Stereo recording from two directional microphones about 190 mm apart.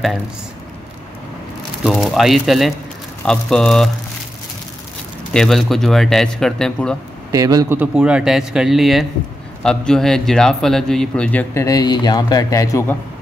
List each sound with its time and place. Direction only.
1.8 s speech: centre (ahead or behind)
5.3 s speech: centre (ahead or behind)
7.2 s a man's voice: 20° right (ahead or behind)
7.8 s a man's voice: 5° right (ahead or behind); by 12.9 s 15° left (ahead or behind)